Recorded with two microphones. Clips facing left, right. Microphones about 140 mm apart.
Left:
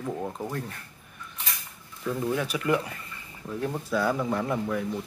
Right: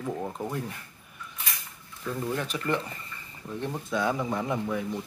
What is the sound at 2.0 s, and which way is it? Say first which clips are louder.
Speech: left 3 dB; 5° left (ahead or behind).